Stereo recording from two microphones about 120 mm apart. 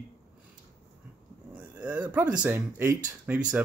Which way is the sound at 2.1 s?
15° right (ahead or behind).